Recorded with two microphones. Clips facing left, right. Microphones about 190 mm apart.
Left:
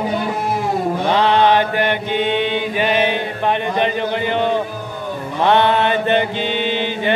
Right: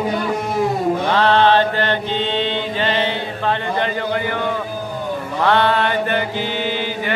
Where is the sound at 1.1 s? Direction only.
15° left (ahead or behind).